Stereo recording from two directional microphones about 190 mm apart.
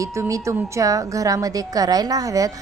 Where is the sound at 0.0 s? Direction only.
15° right (ahead or behind).